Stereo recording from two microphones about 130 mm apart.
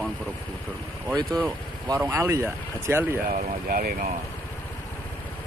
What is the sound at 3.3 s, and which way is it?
Speech, 90° right.